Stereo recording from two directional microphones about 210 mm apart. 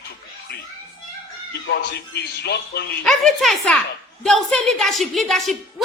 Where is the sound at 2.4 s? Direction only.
50° left (ahead or behind).